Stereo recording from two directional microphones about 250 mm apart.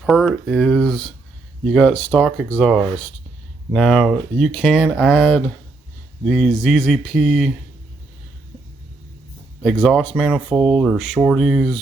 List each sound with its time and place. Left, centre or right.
0.0 s speech: centre
9.6 s speech: centre